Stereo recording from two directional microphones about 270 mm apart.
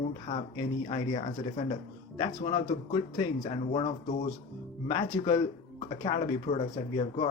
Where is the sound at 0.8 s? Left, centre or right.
Left.